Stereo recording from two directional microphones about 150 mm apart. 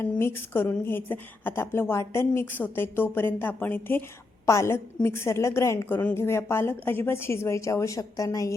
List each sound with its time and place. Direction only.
0.0 s a woman's voice: 15° left (ahead or behind)